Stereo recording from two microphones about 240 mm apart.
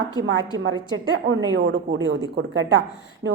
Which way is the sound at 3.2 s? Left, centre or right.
Right.